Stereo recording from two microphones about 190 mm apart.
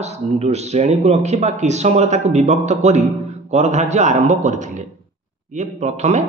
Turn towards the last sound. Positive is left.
turn(degrees=-35)  # may be behind; listen again after turning